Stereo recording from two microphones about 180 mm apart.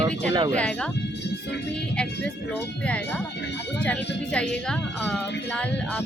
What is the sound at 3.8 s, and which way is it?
A woman's voice, 5° left (ahead or behind).